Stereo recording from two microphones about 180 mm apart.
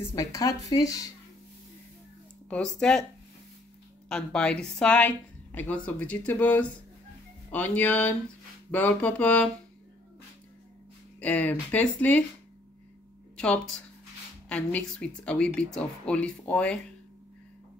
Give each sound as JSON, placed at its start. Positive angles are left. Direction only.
{"t": 0.0, "sound": "speech", "side_deg": 20}
{"t": 2.5, "sound": "speech", "side_deg": 5}
{"t": 4.1, "sound": "a woman's voice", "side_deg": 5}
{"t": 11.1, "sound": "a woman's voice", "side_deg": 10}
{"t": 14.5, "sound": "a woman's voice", "side_deg": 5}